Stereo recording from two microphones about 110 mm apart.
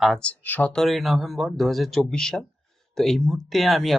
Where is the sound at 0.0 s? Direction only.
5° left (ahead or behind).